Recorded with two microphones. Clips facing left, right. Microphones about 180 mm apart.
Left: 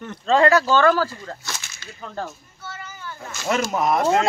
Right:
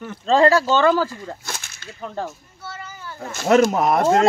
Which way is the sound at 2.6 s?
30° right (ahead or behind).